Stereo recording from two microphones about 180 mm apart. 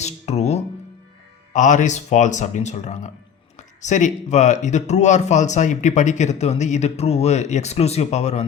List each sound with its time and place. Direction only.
0.0 s music: 35° left (ahead or behind)
1.5 s speech: 45° left (ahead or behind)